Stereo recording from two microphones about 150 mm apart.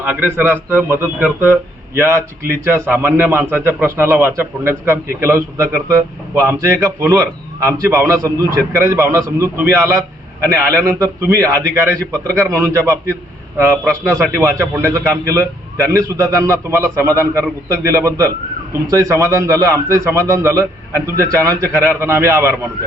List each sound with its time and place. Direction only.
0.0 s a man's voice: 10° right (ahead or behind)
2.6 s a man's voice: 15° right (ahead or behind)